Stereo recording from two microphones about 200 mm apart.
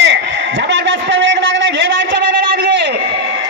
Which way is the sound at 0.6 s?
60° right (ahead or behind).